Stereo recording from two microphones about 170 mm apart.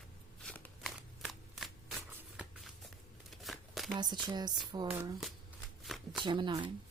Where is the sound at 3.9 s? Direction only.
25° right (ahead or behind).